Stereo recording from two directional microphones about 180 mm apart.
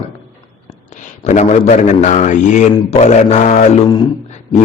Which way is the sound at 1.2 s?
40° left (ahead or behind).